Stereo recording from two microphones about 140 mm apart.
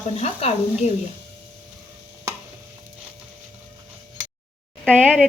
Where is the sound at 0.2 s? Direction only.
50° left (ahead or behind).